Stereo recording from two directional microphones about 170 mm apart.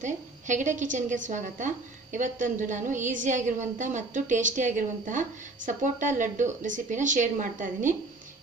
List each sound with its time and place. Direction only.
0.0 s a woman's voice: 45° right (ahead or behind)